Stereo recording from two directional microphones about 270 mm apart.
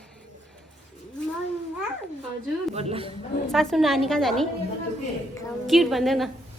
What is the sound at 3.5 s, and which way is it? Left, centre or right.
Speech, centre.